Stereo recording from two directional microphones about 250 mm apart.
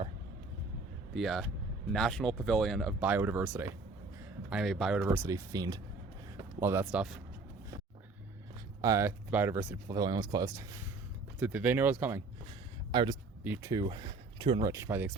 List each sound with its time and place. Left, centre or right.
1.1 s speech: centre
8.8 s speech: centre
12.9 s speech: centre